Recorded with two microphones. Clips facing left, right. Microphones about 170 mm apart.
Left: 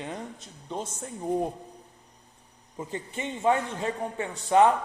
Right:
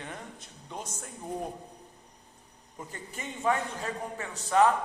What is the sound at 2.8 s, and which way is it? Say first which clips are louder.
A man's voice: left 7 dB; 25° left (ahead or behind).